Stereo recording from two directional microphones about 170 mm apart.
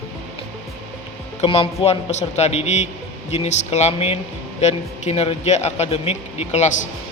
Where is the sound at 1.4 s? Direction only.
35° left (ahead or behind).